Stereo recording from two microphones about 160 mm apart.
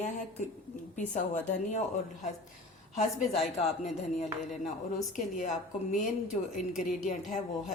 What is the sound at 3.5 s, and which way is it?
Speech, 45° left (ahead or behind).